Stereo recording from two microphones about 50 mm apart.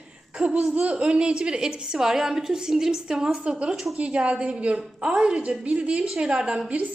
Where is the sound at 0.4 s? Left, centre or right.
Right.